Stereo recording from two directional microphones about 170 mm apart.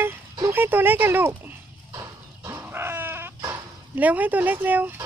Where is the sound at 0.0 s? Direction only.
10° right (ahead or behind).